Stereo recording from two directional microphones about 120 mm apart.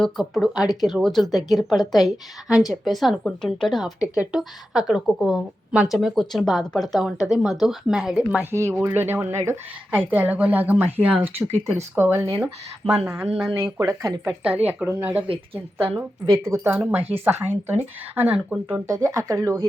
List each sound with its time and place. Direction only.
0.0 s a woman's voice: centre (ahead or behind)
8.4 s speech: 25° right (ahead or behind)
13.7 s speech: 30° right (ahead or behind)
14.5 s speech: 15° right (ahead or behind)
18.9 s speech: 25° right (ahead or behind)